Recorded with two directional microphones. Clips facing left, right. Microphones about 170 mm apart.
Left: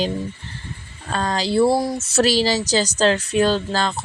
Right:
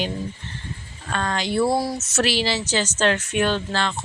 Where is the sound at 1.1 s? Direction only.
35° left (ahead or behind).